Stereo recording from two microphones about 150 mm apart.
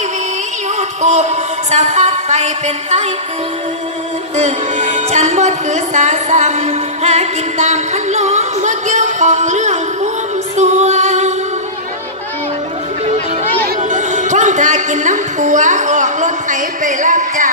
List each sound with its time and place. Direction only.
0.7 s speech: 50° right (ahead or behind)
4.4 s speech: 50° right (ahead or behind)
10.5 s music: 50° right (ahead or behind)
13.7 s music: 55° right (ahead or behind)